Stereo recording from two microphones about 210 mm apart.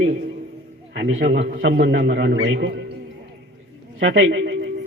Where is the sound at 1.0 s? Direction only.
60° right (ahead or behind).